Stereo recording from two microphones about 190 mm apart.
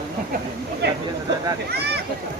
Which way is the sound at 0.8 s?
60° right (ahead or behind).